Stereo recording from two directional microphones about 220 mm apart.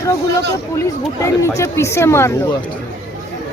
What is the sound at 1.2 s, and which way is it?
Speech, 15° left (ahead or behind).